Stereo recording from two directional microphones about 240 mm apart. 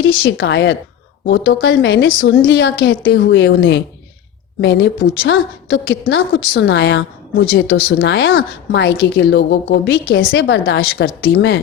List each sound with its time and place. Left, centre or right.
0.1 s a woman's voice: left